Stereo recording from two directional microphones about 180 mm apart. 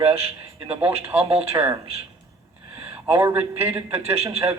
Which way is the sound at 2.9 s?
15° right (ahead or behind).